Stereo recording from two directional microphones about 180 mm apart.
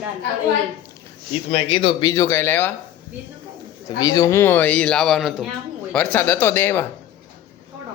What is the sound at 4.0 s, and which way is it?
A man's voice, 20° left (ahead or behind).